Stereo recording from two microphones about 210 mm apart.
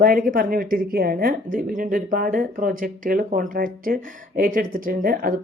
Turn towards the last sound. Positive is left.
turn(degrees=-40)  # may be behind; listen again after turning